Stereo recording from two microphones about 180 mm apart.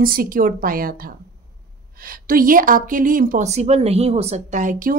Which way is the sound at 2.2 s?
50° right (ahead or behind).